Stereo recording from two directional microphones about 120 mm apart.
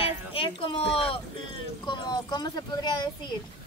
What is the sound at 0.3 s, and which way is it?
Speech, 50° left (ahead or behind).